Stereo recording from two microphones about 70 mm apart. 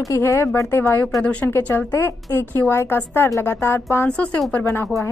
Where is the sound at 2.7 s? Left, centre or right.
Left.